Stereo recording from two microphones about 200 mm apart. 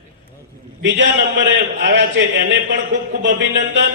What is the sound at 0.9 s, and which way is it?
Speech, 60° right (ahead or behind).